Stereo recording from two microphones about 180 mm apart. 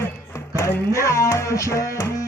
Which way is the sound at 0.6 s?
15° left (ahead or behind).